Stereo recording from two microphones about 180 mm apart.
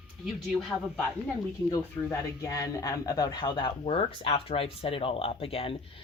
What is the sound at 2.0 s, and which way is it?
Speech, 15° left (ahead or behind).